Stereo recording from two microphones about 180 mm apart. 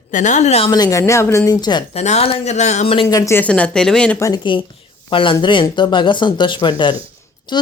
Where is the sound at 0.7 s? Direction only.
20° left (ahead or behind).